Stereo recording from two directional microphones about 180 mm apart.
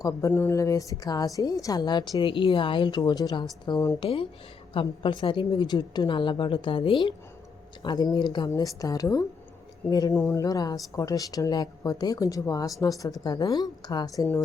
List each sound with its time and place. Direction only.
0.0 s a woman's voice: 15° left (ahead or behind)
4.0 s a woman's voice: 30° left (ahead or behind)